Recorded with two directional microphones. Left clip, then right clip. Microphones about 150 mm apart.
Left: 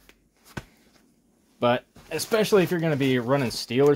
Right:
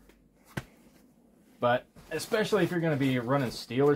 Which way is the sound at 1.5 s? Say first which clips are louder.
Left 4 dB; 90° left.